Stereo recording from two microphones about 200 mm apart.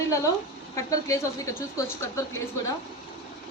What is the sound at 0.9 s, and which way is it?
A woman's voice, 15° left (ahead or behind).